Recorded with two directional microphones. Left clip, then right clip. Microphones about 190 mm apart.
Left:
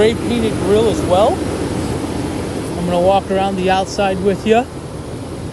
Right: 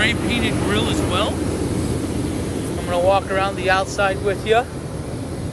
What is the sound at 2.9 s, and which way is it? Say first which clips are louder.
Speech: left 4 dB; 40° left (ahead or behind).